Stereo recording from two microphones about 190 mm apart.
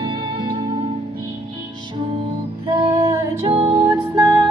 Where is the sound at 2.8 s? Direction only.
15° right (ahead or behind).